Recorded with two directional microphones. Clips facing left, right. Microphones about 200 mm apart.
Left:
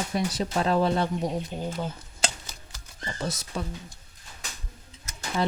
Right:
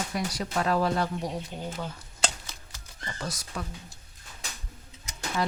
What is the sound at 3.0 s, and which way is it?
Speech, 25° left (ahead or behind).